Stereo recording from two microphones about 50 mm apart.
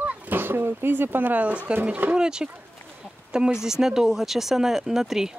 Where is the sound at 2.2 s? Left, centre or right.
Centre.